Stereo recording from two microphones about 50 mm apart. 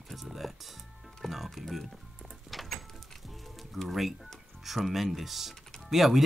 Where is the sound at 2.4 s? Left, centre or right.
Centre.